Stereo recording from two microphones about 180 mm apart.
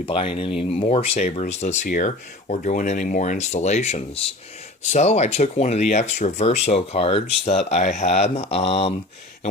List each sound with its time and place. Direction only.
0.0 s speech: 30° left (ahead or behind)